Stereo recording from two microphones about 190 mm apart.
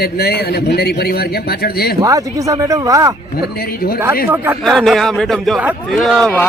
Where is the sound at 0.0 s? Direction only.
55° left (ahead or behind).